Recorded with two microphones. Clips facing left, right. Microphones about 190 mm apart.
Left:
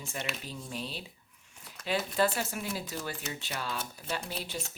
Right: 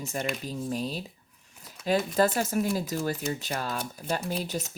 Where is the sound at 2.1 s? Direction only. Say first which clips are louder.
Right 3 dB; 40° right (ahead or behind).